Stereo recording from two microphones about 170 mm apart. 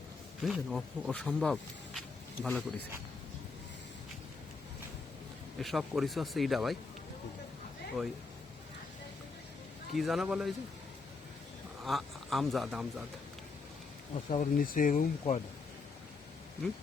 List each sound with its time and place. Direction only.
0.4 s speech: centre (ahead or behind)
5.5 s speech: centre (ahead or behind)
9.9 s speech: centre (ahead or behind)
11.9 s speech: centre (ahead or behind)
14.3 s speech: 55° left (ahead or behind)